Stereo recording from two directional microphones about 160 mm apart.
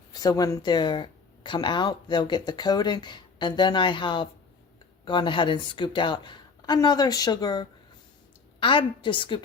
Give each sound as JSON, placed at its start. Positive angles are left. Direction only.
{"t": 0.1, "sound": "a woman's voice", "side_deg": 25}